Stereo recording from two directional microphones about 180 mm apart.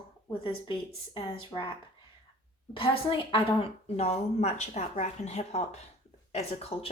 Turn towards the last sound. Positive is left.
turn(degrees=35)  # may be behind; listen again after turning